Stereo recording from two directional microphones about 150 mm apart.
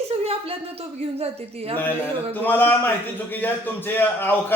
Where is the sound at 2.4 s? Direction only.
15° left (ahead or behind).